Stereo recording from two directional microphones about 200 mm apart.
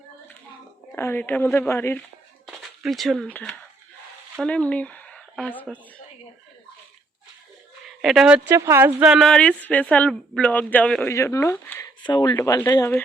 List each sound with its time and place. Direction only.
0.9 s a woman's voice: 10° left (ahead or behind)
2.5 s speech: centre (ahead or behind)
8.0 s speech: centre (ahead or behind)
12.0 s a woman's voice: 20° left (ahead or behind)